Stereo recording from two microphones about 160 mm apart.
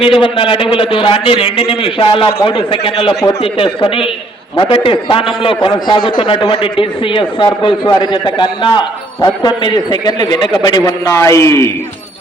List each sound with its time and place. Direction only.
0.0 s a man's voice: 35° left (ahead or behind); by 11.7 s 15° left (ahead or behind)